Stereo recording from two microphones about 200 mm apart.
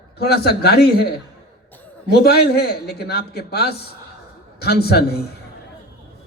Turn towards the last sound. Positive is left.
turn(degrees=50)  # may be behind; listen again after turning